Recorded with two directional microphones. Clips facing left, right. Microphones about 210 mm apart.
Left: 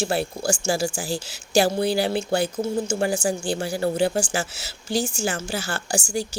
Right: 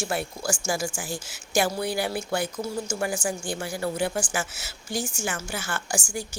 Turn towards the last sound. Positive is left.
turn(degrees=35)  # may be behind; listen again after turning